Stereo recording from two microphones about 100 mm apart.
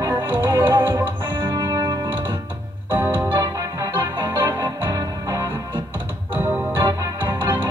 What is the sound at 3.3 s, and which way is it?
Music, 35° right (ahead or behind).